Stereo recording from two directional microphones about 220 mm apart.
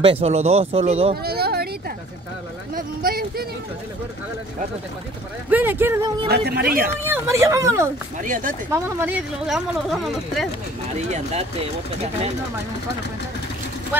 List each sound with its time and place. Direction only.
0.0 s speech: 25° right (ahead or behind)
1.2 s a sound: 45° right (ahead or behind)
2.7 s speech: 40° right (ahead or behind)
5.5 s speech: 10° right (ahead or behind)
6.2 s speech: 45° right (ahead or behind)
7.1 s speech: 10° right (ahead or behind)
8.2 s speech: 35° right (ahead or behind)
8.6 s speech: 10° right (ahead or behind)
11.1 s speech: 30° right (ahead or behind)